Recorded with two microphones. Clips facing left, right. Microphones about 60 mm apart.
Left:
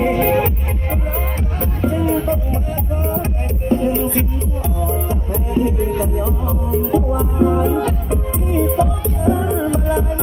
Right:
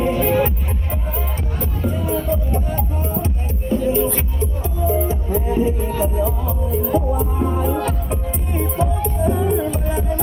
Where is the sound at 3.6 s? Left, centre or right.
Left.